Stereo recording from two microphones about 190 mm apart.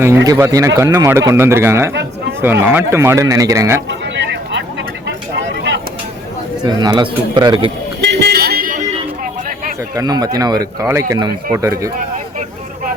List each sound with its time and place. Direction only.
0.3 s speech: 15° right (ahead or behind)
3.8 s vehicle: 70° right (ahead or behind)
5.0 s a sound: 70° right (ahead or behind)
6.6 s speech: 20° right (ahead or behind)
8.0 s a sound: 60° right (ahead or behind)
9.9 s speech: 20° right (ahead or behind)